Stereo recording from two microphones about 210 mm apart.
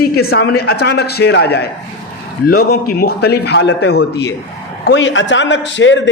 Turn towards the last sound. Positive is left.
turn(degrees=60)  # may be behind; listen again after turning